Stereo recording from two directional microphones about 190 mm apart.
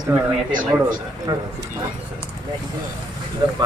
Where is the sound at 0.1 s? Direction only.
10° right (ahead or behind).